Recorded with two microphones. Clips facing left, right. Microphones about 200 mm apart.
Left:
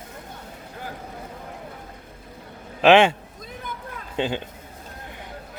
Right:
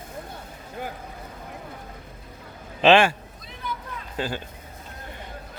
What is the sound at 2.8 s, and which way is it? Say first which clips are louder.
Speech: left 2 dB; 15° left (ahead or behind).